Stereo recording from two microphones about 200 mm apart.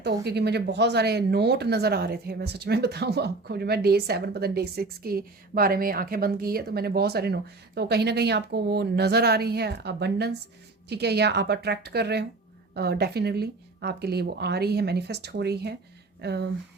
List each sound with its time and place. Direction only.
0.0 s a woman's voice: 55° right (ahead or behind)